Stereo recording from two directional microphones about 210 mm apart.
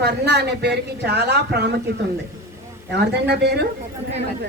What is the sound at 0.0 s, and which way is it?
Speech, 55° right (ahead or behind).